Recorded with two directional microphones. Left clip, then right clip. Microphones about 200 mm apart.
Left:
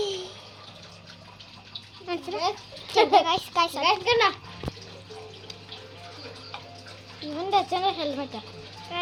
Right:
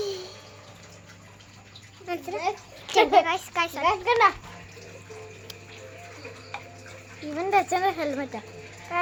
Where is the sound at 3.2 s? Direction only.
Centre (ahead or behind).